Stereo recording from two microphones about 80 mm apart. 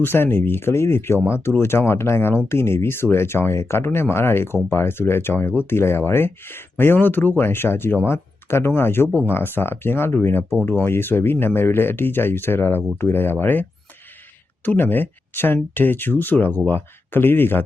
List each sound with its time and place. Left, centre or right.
0.0 s speech: left